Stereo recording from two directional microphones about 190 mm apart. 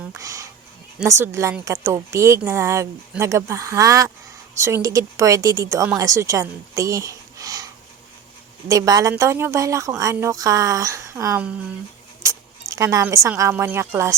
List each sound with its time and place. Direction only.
0.2 s a woman's voice: 15° right (ahead or behind)